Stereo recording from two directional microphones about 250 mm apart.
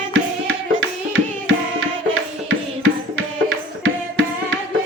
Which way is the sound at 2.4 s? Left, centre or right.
Right.